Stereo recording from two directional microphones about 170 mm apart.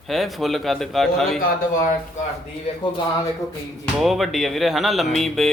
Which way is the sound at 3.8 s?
Centre (ahead or behind).